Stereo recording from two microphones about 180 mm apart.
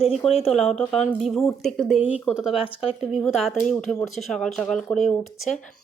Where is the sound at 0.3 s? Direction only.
35° left (ahead or behind).